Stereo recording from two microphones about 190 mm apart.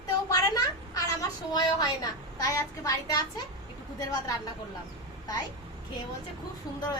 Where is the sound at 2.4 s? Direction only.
15° left (ahead or behind).